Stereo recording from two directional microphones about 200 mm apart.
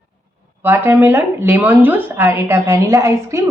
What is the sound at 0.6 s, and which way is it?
A woman's voice, 10° right (ahead or behind).